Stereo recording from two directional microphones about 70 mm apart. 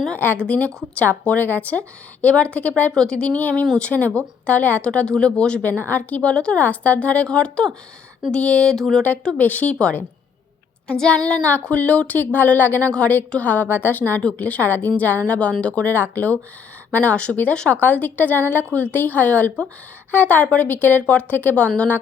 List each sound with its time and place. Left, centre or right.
0.4 s speech: centre
8.7 s speech: centre
9.0 s speech: centre